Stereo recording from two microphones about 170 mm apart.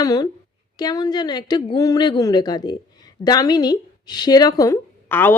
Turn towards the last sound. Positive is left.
turn(degrees=10)  # may be behind; listen again after turning